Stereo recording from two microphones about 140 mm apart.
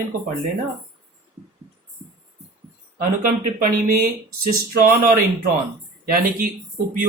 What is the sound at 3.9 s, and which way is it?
Speech, 90° right.